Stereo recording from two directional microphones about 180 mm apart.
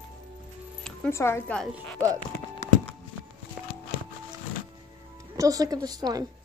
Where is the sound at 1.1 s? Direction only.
15° left (ahead or behind).